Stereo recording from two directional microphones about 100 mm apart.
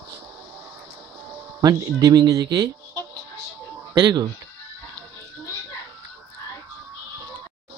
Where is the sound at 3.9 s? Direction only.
45° right (ahead or behind).